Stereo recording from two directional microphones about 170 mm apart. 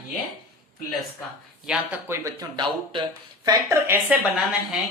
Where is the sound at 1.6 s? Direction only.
5° right (ahead or behind).